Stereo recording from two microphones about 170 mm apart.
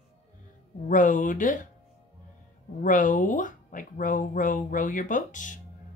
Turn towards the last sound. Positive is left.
turn(degrees=50)  # may be behind; listen again after turning